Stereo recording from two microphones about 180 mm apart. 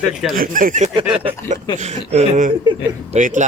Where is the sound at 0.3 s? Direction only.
50° right (ahead or behind).